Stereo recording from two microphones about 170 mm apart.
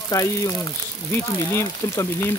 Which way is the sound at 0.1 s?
20° left (ahead or behind).